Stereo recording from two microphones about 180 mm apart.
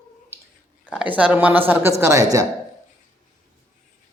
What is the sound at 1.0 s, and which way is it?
A woman's voice, 5° right (ahead or behind).